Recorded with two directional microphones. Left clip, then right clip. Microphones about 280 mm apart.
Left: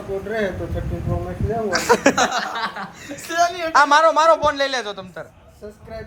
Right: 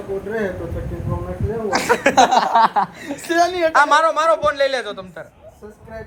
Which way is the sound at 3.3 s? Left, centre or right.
Right.